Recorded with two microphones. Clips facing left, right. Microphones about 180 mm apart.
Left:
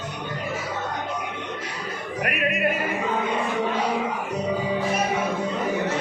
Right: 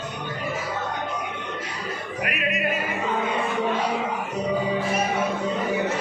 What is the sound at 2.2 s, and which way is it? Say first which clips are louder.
Music: left 2 dB; 55° left (ahead or behind).